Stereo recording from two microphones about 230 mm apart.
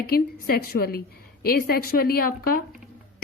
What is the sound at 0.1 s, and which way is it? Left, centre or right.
A woman's voice, left.